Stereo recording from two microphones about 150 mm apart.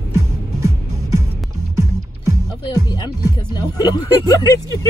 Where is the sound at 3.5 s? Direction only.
30° left (ahead or behind).